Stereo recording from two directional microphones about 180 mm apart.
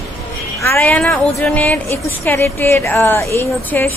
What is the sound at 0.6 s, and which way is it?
A woman's voice, 10° left (ahead or behind).